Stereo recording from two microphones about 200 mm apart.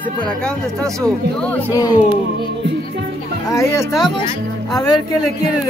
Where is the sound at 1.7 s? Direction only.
15° left (ahead or behind).